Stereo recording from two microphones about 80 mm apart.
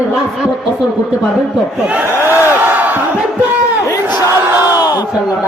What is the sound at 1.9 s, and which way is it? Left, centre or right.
Crowd, right.